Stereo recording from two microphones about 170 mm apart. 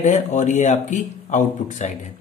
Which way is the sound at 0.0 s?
45° left (ahead or behind).